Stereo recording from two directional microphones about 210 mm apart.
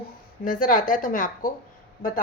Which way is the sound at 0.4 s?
40° left (ahead or behind).